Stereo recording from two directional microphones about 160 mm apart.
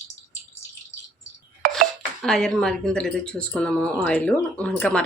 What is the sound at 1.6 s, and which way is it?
Dishes, 60° right (ahead or behind).